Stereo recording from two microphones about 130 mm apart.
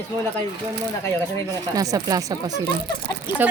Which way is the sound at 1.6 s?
25° right (ahead or behind).